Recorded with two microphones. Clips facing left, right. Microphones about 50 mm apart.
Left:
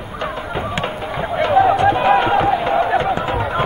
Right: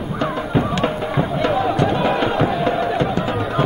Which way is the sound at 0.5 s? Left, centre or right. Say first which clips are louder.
Right 5 dB; centre.